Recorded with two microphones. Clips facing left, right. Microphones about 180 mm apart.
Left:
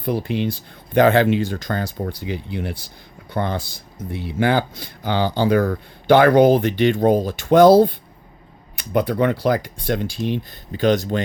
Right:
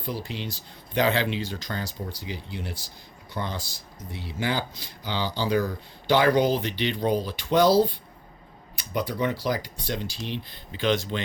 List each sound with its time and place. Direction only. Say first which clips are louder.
0.0 s speech: left 11 dB; 55° left (ahead or behind)